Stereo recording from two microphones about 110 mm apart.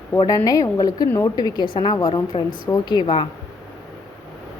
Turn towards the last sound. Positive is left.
turn(degrees=45)  # may be behind; listen again after turning